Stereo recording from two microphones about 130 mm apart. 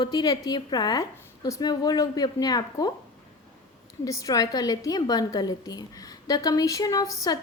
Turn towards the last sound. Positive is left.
turn(degrees=30)  # may be behind; listen again after turning